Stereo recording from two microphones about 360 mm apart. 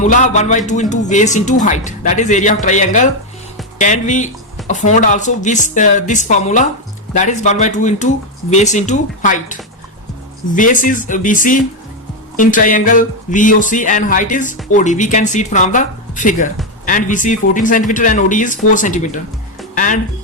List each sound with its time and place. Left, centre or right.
0.0 s speech: centre
19.7 s music: left